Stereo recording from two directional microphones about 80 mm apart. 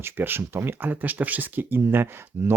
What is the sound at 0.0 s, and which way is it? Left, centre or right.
Speech, right.